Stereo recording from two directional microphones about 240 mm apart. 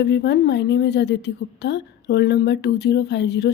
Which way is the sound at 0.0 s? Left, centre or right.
Left.